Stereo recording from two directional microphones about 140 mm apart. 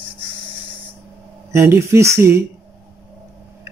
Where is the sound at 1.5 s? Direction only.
20° right (ahead or behind).